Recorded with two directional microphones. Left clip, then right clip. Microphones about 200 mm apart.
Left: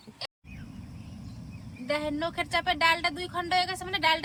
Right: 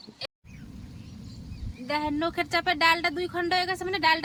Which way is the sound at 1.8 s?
15° right (ahead or behind).